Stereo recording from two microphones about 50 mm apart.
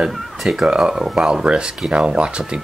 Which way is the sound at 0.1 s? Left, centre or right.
Centre.